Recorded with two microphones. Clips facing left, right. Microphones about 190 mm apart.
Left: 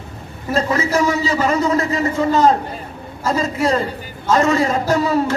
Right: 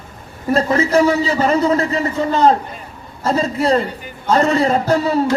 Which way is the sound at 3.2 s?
30° right (ahead or behind).